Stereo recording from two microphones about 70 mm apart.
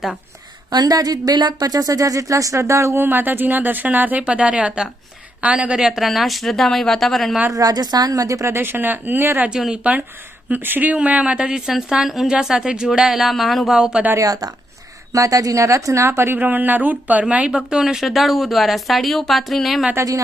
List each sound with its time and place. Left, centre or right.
0.7 s speech: right
3.0 s speech: right; by 7.3 s centre
7.5 s speech: right
8.5 s speech: right
9.5 s speech: centre
10.5 s speech: right; by 14.0 s centre
14.2 s speech: right; by 19.8 s centre